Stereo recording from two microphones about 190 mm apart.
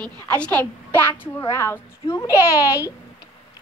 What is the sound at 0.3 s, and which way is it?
A child's voice, 5° left (ahead or behind).